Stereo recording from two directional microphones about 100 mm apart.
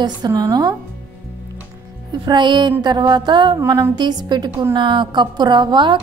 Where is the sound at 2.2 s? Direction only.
50° right (ahead or behind).